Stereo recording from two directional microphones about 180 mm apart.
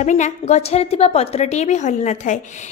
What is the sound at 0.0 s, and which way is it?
A woman's voice, 40° left (ahead or behind).